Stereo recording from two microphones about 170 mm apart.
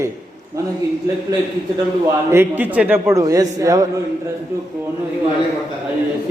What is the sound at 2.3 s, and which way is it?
A man's voice, 10° right (ahead or behind).